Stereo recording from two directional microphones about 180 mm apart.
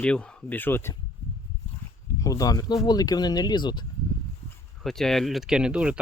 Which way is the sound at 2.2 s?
20° left (ahead or behind).